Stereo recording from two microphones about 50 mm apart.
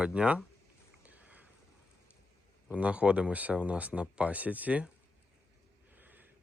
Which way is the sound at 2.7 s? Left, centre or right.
Right.